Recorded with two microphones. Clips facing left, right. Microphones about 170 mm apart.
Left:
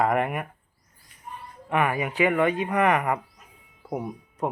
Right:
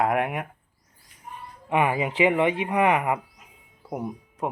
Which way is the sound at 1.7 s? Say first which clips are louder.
Right 1 dB; 20° right (ahead or behind).